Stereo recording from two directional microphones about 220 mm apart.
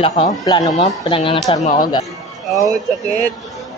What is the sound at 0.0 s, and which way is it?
Speech, 25° left (ahead or behind).